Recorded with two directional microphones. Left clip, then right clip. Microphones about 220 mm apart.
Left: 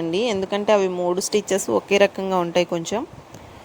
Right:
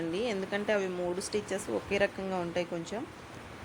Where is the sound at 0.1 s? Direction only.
35° left (ahead or behind).